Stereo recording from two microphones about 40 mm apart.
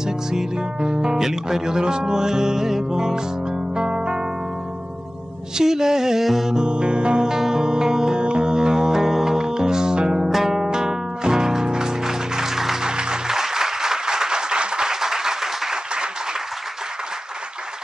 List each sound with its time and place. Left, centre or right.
0.0 s speech: centre
5.6 s music: centre
10.3 s music: centre
10.6 s music: centre
12.9 s applause: centre